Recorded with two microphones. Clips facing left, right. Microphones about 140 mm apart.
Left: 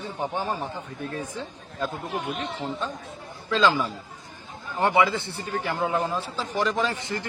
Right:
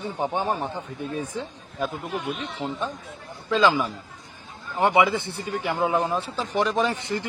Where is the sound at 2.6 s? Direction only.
15° right (ahead or behind).